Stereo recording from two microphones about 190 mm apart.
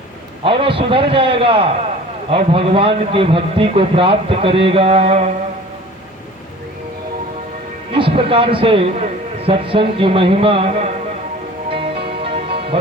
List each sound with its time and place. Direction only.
0.4 s a man's voice: 25° right (ahead or behind)
7.9 s a man's voice: 30° right (ahead or behind)
12.2 s music: 30° right (ahead or behind)